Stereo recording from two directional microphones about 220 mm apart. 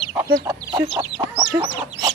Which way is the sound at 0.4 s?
20° right (ahead or behind).